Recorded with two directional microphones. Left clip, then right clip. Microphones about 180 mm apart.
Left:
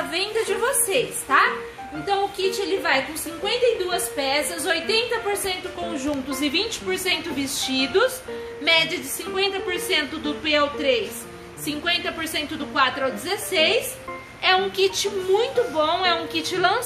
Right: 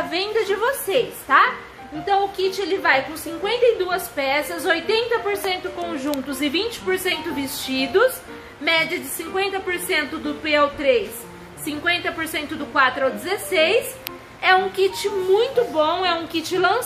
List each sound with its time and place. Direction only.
0.1 s a woman's voice: 20° right (ahead or behind)
15.3 s a woman's voice: 25° right (ahead or behind)